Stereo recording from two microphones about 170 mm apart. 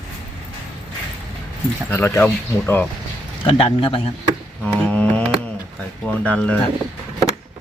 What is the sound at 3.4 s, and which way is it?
Speech, 30° left (ahead or behind).